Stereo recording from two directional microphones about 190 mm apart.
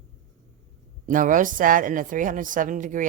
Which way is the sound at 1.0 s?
45° right (ahead or behind).